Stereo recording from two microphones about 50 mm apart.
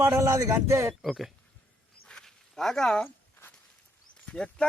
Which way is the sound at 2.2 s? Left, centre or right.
Centre.